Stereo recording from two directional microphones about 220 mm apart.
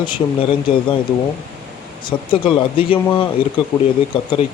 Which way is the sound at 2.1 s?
20° left (ahead or behind).